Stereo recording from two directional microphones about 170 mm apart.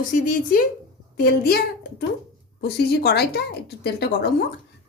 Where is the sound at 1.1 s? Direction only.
65° left (ahead or behind).